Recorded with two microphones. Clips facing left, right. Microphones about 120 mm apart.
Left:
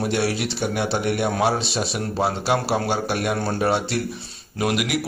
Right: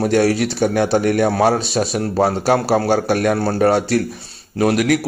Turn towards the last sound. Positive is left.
turn(degrees=-45)  # may be behind; listen again after turning